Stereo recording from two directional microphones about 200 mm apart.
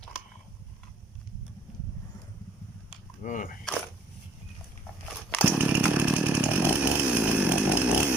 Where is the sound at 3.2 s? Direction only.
40° left (ahead or behind).